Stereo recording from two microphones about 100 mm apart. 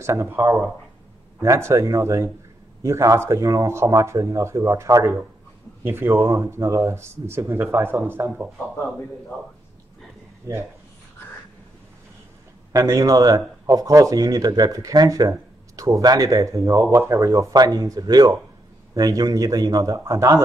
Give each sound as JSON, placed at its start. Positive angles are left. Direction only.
{"t": 0.0, "sound": "speech", "side_deg": -25}
{"t": 5.9, "sound": "speech", "side_deg": -20}
{"t": 10.5, "sound": "speech", "side_deg": -30}
{"t": 12.7, "sound": "speech", "side_deg": -30}